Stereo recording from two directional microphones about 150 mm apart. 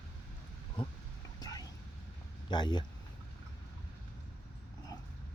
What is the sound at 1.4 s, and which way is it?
Whispering, 25° left (ahead or behind).